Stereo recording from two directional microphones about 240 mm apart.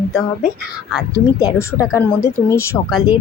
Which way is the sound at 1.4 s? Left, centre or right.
Centre.